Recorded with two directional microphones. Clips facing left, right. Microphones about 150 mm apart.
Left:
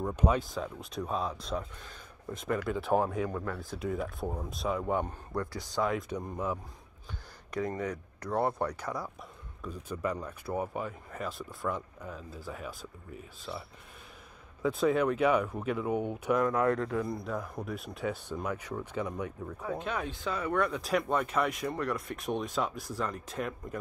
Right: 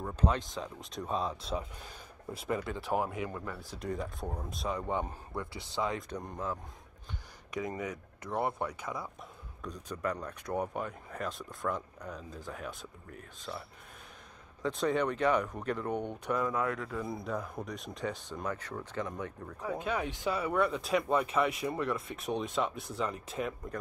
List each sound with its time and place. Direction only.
0.0 s speech: 10° left (ahead or behind); by 3.3 s 10° right (ahead or behind)
3.8 s speech: 5° left (ahead or behind)
7.5 s speech: 10° right (ahead or behind); by 16.4 s 5° left (ahead or behind)
16.6 s speech: 30° left (ahead or behind)
17.0 s speech: centre (ahead or behind)
19.6 s speech: 10° right (ahead or behind)